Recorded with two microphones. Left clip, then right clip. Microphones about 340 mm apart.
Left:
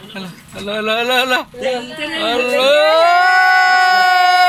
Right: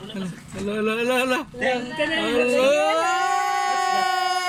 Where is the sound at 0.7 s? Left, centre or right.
Centre.